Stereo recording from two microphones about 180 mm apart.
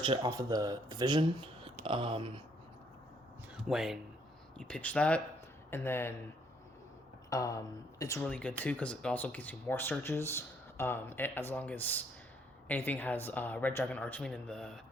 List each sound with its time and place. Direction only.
0.0 s speech: 25° right (ahead or behind)
3.5 s speech: centre (ahead or behind); by 6.1 s 15° left (ahead or behind)
7.3 s speech: 20° left (ahead or behind)